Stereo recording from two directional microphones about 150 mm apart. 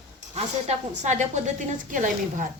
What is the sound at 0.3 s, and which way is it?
A woman's voice, 50° right (ahead or behind).